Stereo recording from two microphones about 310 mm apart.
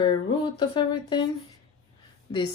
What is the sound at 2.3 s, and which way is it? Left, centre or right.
Speech, centre.